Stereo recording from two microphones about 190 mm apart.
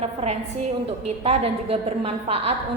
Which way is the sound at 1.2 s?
30° right (ahead or behind).